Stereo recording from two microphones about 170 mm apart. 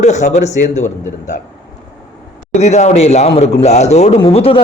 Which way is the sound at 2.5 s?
40° left (ahead or behind).